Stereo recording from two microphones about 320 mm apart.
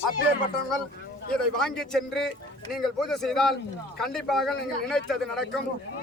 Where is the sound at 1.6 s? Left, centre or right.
Centre.